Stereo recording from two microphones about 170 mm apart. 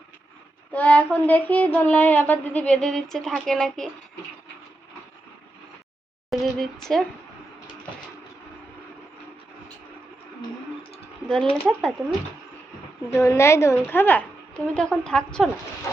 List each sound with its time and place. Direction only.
0.7 s speech: 10° left (ahead or behind)
6.3 s a sound: centre (ahead or behind)
11.5 s a woman's voice: 5° left (ahead or behind)
13.1 s a woman's voice: 15° left (ahead or behind)